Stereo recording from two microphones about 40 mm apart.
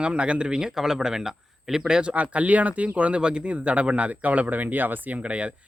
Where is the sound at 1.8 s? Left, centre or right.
Right.